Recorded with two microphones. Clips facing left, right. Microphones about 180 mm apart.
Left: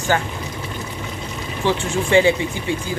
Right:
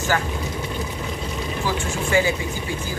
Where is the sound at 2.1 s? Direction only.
25° left (ahead or behind).